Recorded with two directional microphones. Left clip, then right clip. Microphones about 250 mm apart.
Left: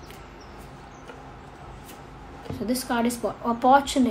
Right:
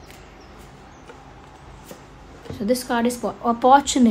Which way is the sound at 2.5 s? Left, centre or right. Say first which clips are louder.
Right 5 dB; right.